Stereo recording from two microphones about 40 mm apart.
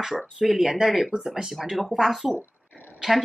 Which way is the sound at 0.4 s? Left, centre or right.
Centre.